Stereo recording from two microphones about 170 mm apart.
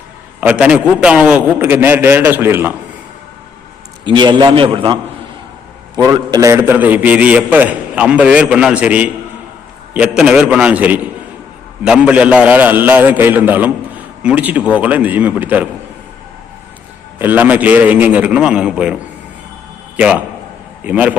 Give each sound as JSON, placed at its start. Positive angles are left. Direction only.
{"t": 0.3, "sound": "a man's voice", "side_deg": -5}
{"t": 4.0, "sound": "a man's voice", "side_deg": -25}
{"t": 6.0, "sound": "a man's voice", "side_deg": -25}
{"t": 17.2, "sound": "a man's voice", "side_deg": -10}
{"t": 20.0, "sound": "a man's voice", "side_deg": -10}